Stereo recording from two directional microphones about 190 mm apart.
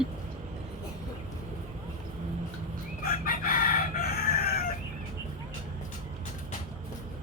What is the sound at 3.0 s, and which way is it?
Chicken, 50° left (ahead or behind).